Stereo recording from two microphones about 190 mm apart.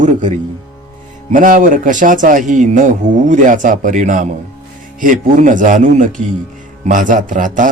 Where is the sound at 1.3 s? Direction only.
45° right (ahead or behind).